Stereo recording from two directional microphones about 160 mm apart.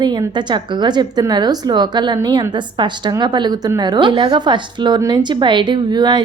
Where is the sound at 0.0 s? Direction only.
25° right (ahead or behind).